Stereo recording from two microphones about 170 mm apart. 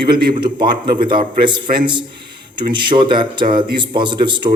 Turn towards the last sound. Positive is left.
turn(degrees=-25)  # may be behind; listen again after turning